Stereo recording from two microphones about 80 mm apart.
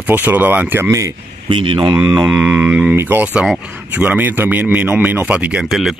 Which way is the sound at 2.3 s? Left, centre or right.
Right.